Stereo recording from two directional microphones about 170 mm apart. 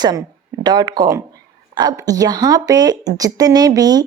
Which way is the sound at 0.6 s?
25° right (ahead or behind).